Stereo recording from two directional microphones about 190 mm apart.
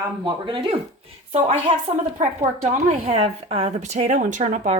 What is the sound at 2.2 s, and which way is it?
Speech, 40° right (ahead or behind).